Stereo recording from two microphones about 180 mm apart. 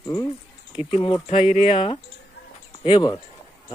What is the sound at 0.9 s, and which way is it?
Speech, 30° left (ahead or behind).